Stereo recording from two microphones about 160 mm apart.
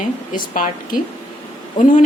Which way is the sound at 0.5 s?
55° left (ahead or behind).